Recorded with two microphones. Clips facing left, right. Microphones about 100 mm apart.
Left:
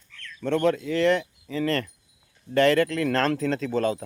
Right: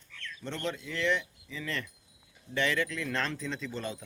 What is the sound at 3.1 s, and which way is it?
Speech, 45° left (ahead or behind).